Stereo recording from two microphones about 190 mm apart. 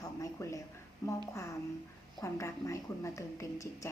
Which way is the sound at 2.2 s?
15° left (ahead or behind).